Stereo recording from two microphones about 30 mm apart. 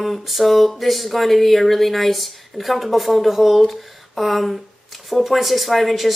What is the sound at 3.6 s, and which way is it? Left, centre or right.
Speech, centre.